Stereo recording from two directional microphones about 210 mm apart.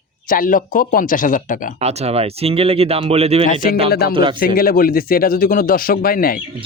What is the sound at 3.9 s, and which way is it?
Speech, 50° left (ahead or behind).